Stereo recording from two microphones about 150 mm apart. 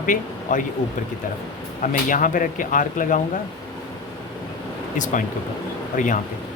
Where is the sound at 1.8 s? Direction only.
60° left (ahead or behind).